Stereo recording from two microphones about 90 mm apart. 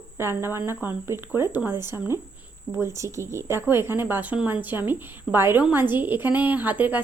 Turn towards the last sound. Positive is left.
turn(degrees=-20)  # may be behind; listen again after turning